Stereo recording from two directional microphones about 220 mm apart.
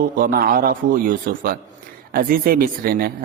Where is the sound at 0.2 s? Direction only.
40° right (ahead or behind).